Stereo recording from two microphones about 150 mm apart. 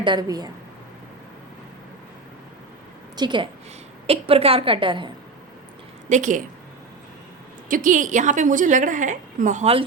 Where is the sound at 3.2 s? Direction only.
30° right (ahead or behind).